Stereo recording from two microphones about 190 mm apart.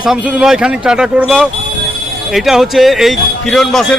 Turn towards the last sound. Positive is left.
turn(degrees=0)  # may be behind; listen again after turning